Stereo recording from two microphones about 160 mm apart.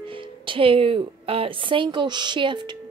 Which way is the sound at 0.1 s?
35° right (ahead or behind).